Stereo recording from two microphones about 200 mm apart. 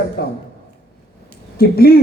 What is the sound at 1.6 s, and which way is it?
Speech, 50° left (ahead or behind).